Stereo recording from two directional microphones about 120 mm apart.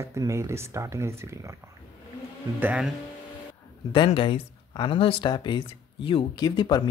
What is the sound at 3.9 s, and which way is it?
Speech, 45° left (ahead or behind).